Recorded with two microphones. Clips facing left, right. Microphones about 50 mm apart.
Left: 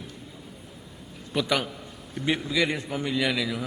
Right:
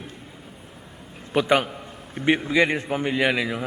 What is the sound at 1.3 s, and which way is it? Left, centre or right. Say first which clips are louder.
A man's voice: right 6 dB; right.